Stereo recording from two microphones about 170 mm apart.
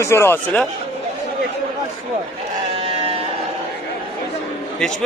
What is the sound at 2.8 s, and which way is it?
Sheep, 35° right (ahead or behind).